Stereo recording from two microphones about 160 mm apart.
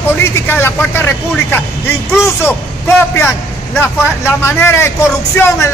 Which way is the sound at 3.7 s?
15° left (ahead or behind).